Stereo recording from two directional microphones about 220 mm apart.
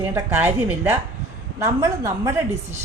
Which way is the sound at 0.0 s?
10° right (ahead or behind).